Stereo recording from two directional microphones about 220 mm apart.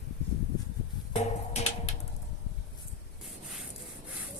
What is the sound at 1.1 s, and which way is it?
Finger snapping, 30° left (ahead or behind).